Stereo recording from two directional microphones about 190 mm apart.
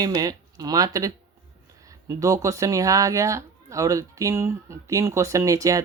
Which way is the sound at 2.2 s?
15° right (ahead or behind).